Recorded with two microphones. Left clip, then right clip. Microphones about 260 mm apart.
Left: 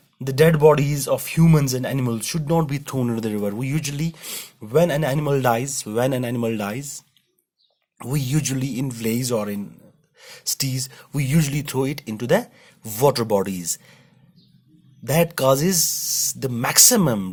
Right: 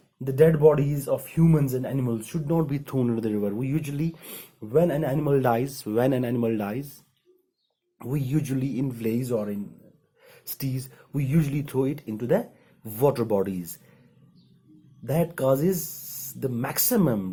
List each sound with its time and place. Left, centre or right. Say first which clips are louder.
0.3 s speech: left 3 dB; left
2.6 s speech: left 2 dB; left
4.7 s speech: left 4 dB; left
7.9 s speech: left 3 dB; left
15.0 s speech: left 6 dB; left